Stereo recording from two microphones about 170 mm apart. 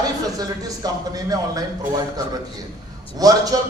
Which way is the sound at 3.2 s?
20° right (ahead or behind).